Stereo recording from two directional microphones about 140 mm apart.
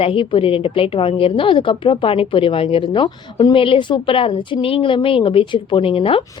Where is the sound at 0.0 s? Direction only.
40° left (ahead or behind).